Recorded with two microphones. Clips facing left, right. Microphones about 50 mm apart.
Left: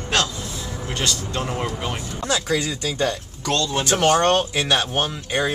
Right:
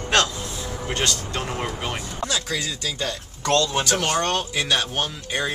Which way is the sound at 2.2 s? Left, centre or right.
Left.